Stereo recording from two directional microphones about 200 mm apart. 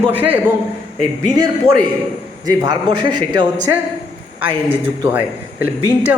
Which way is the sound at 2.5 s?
20° right (ahead or behind).